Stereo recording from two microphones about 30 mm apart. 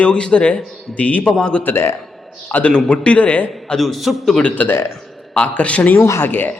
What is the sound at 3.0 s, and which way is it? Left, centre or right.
Speech, left.